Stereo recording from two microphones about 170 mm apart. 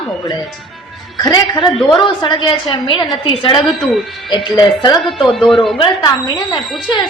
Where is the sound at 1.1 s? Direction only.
25° left (ahead or behind).